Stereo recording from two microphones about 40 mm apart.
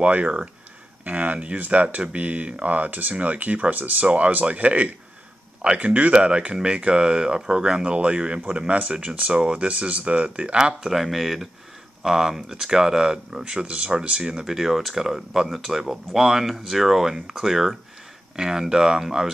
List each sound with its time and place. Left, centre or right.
0.0 s speech: right
6.1 s speech: right
10.6 s speech: centre
11.0 s speech: centre; by 14.4 s right
14.4 s speech: centre